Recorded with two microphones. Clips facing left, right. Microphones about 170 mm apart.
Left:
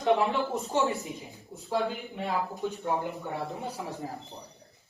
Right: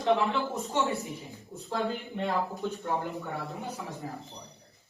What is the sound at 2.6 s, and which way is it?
Speech, 15° left (ahead or behind).